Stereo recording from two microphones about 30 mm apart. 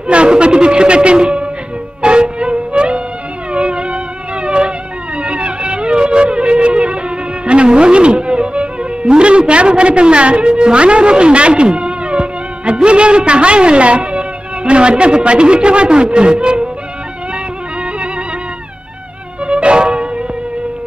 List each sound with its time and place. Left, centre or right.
0.0 s speech: right
2.0 s music: right
15.2 s a man's voice: right
19.4 s music: right